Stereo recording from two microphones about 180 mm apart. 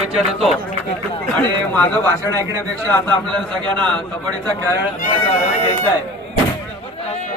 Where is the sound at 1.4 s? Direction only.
10° left (ahead or behind).